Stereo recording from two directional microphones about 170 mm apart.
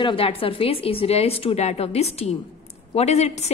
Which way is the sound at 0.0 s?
30° left (ahead or behind).